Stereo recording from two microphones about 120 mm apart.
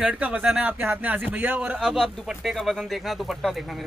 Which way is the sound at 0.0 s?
10° right (ahead or behind).